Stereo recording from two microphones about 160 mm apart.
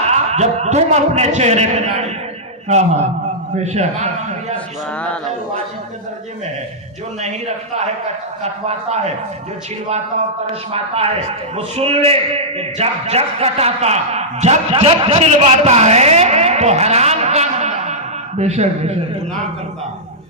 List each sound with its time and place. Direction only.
0.1 s a man's voice: 45° right (ahead or behind)
4.5 s a sound: 10° left (ahead or behind)
7.2 s a man's voice: 45° right (ahead or behind)
10.7 s a man's voice: 40° right (ahead or behind)